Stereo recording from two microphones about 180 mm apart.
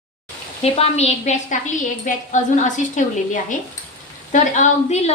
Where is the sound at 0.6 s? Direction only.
35° left (ahead or behind).